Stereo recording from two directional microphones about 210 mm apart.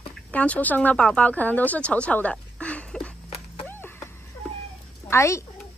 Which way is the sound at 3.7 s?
10° left (ahead or behind).